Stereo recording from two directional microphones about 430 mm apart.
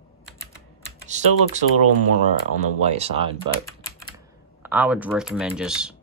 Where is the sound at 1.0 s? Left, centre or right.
Centre.